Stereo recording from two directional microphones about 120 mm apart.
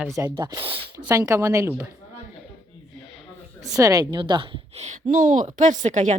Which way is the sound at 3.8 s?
30° right (ahead or behind).